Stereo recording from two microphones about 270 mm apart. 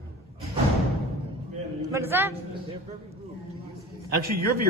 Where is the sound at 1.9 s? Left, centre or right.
Centre.